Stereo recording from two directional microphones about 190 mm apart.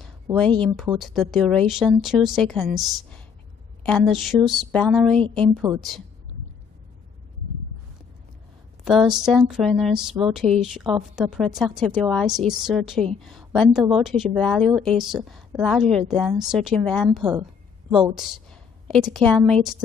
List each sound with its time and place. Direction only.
0.3 s speech: 20° right (ahead or behind)
0.8 s a woman's voice: centre (ahead or behind)
8.8 s a woman's voice: centre (ahead or behind)
17.3 s a sound: 20° right (ahead or behind)
18.1 s a woman's voice: centre (ahead or behind)